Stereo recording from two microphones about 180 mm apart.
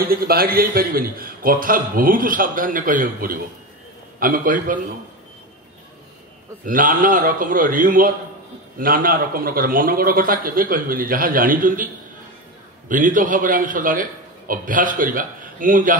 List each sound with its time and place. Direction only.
0.0 s a man's voice: 55° right (ahead or behind)
6.6 s a man's voice: 50° right (ahead or behind)